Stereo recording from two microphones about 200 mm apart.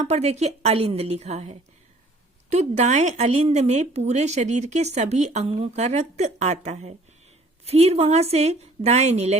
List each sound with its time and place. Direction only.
0.0 s a woman's voice: 35° right (ahead or behind)